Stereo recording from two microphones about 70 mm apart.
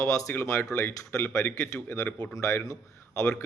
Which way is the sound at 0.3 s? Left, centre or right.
Left.